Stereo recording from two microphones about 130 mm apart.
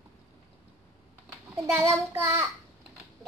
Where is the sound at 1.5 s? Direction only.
20° right (ahead or behind).